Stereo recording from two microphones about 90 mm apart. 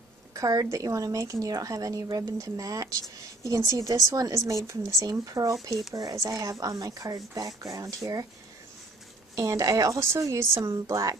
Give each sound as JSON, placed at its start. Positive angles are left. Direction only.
{"t": 0.3, "sound": "speech", "side_deg": -40}
{"t": 5.2, "sound": "speech", "side_deg": -45}
{"t": 9.3, "sound": "speech", "side_deg": -35}